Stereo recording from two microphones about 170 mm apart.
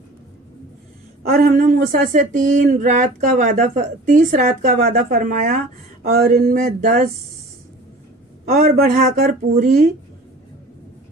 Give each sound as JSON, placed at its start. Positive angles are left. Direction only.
{"t": 1.3, "sound": "speech", "side_deg": -55}
{"t": 8.5, "sound": "speech", "side_deg": -60}